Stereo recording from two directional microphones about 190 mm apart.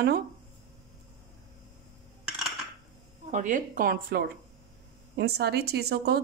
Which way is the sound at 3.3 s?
40° right (ahead or behind).